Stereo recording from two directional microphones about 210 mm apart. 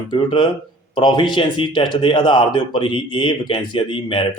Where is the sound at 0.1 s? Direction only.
20° left (ahead or behind).